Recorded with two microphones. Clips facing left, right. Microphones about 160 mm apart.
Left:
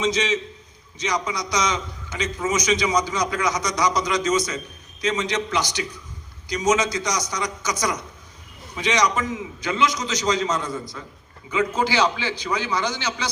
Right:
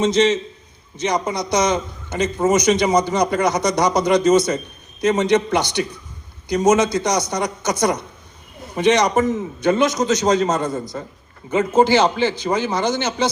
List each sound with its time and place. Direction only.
0.0 s a man's voice: 55° right (ahead or behind)